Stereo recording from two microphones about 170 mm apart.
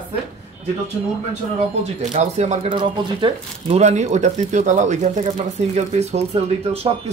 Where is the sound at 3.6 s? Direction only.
40° right (ahead or behind).